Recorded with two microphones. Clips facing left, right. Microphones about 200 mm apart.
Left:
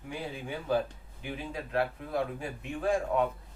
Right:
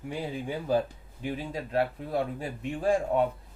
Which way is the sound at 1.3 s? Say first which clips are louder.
Right 4 dB; 35° right (ahead or behind).